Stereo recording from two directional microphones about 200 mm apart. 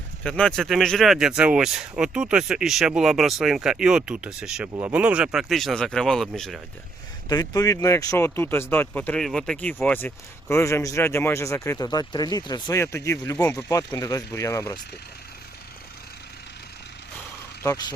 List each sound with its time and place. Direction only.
0.2 s speech: 5° left (ahead or behind)
7.3 s speech: 15° left (ahead or behind)
17.6 s speech: 15° left (ahead or behind)